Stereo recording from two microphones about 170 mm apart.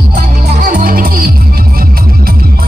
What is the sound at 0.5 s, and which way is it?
Music, 50° right (ahead or behind).